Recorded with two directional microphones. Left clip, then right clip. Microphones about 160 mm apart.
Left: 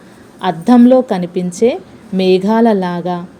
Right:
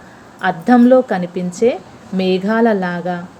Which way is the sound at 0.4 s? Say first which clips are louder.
Left 2 dB; 25° left (ahead or behind).